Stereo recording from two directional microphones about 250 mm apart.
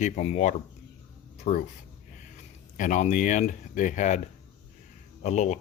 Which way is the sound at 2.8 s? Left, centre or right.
Left.